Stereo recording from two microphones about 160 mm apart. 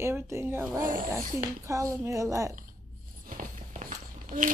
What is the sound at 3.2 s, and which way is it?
Walk, 60° right (ahead or behind).